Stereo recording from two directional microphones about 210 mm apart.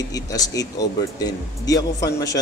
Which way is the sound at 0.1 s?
15° left (ahead or behind).